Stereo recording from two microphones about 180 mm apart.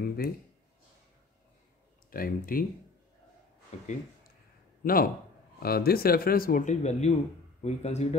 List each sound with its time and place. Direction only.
0.0 s a sound: 60° left (ahead or behind)
2.0 s speech: 50° left (ahead or behind)
3.7 s speech: 40° left (ahead or behind)
4.8 s a man's voice: 55° left (ahead or behind); by 8.2 s 35° left (ahead or behind)